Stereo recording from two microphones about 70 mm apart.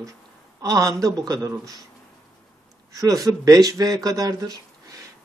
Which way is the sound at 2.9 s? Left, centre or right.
Right.